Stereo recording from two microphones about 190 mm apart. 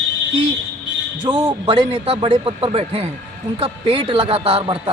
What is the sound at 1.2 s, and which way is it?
Speech, 25° right (ahead or behind).